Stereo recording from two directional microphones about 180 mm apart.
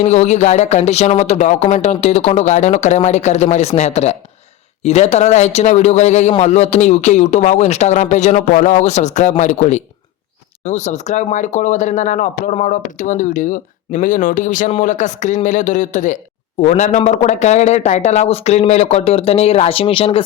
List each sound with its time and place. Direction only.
0.0 s speech: 40° left (ahead or behind)